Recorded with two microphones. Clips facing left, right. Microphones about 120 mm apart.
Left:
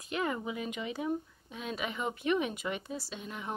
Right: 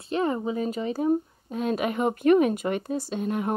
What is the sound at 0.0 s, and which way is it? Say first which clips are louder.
Speech: right 8 dB; 35° right (ahead or behind).